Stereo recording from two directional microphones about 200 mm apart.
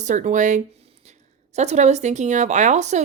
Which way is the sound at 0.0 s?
40° right (ahead or behind).